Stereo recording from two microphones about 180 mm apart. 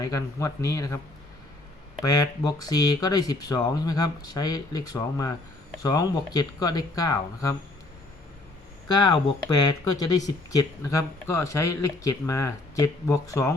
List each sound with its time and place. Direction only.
0.0 s speech: 20° left (ahead or behind)
2.0 s speech: 20° left (ahead or behind)
8.9 s speech: 25° left (ahead or behind)